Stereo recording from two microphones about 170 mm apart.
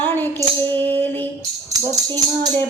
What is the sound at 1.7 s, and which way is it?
Speech, 20° right (ahead or behind).